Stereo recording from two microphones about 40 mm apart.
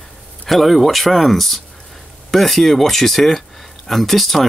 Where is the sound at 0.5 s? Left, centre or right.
Centre.